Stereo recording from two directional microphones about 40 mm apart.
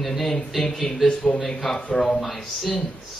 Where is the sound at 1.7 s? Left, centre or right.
Centre.